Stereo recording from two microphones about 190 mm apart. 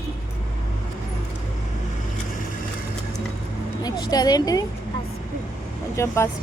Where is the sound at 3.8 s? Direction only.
20° left (ahead or behind).